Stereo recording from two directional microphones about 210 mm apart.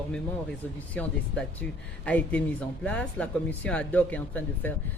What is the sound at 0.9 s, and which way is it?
Speech, 5° left (ahead or behind).